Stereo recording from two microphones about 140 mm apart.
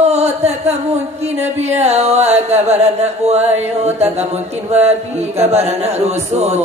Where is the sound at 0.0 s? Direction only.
50° right (ahead or behind).